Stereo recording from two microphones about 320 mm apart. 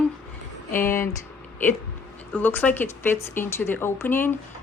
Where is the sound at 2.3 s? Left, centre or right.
Centre.